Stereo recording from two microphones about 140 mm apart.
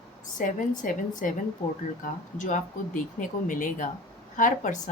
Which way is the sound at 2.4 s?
70° left (ahead or behind).